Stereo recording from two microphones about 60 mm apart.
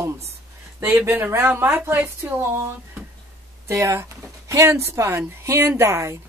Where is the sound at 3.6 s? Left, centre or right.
Right.